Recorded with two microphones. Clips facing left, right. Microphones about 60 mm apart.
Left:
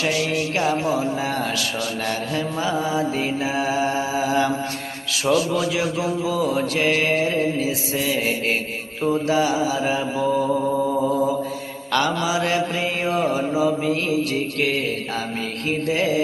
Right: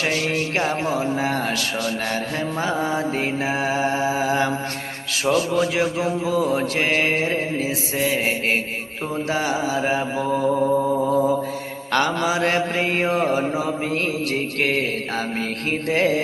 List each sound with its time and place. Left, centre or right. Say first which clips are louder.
0.0 s speech: even; right
15.9 s music: right 2 dB; right